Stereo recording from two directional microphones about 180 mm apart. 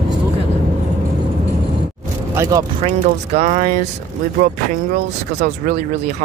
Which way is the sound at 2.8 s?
35° right (ahead or behind).